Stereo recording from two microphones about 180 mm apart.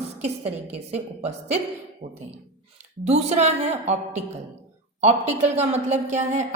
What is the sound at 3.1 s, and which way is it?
A woman's voice, 35° right (ahead or behind).